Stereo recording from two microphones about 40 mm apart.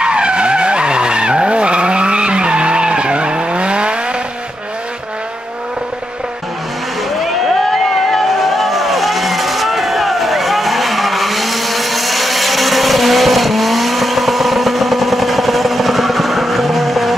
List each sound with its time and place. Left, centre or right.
0.0 s vehicle: right
7.7 s vehicle: centre